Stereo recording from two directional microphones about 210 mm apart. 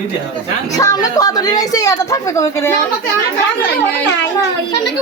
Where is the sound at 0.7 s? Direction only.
15° left (ahead or behind).